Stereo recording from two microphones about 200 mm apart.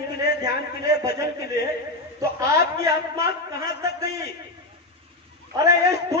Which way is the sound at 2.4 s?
15° right (ahead or behind).